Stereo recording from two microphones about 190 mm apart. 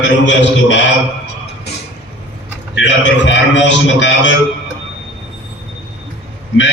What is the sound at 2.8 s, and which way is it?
A man's voice, 70° left (ahead or behind).